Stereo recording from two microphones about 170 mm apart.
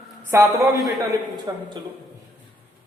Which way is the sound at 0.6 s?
20° right (ahead or behind).